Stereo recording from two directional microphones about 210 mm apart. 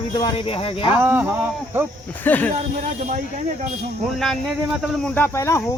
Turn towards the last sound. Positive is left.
turn(degrees=15)  # may be behind; listen again after turning